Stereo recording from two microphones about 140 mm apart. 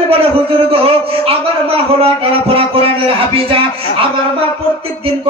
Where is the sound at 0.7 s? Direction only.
40° right (ahead or behind).